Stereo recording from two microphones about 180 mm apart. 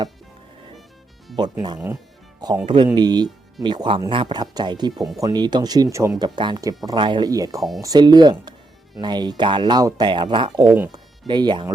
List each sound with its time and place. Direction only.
2.6 s speech: 25° right (ahead or behind)